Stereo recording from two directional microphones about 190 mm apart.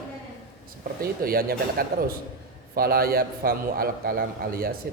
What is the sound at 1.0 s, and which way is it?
A man's voice, 50° right (ahead or behind).